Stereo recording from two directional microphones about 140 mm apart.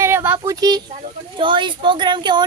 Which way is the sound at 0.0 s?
15° right (ahead or behind).